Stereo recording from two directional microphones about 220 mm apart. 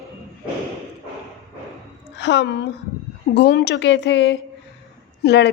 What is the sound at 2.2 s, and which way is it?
A woman's voice, 55° left (ahead or behind).